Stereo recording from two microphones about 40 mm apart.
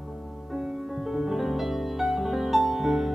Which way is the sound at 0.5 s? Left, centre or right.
Centre.